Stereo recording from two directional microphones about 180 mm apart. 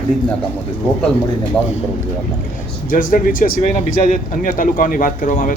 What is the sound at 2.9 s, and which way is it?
Speech, 50° left (ahead or behind).